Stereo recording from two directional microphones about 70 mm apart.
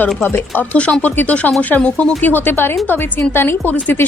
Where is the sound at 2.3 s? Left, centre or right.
Left.